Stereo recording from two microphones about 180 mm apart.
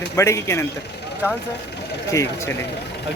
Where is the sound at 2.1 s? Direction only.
15° left (ahead or behind).